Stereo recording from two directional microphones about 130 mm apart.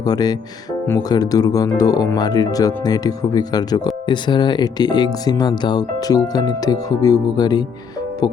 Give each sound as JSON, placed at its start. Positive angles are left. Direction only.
{"t": 0.0, "sound": "speech", "side_deg": 30}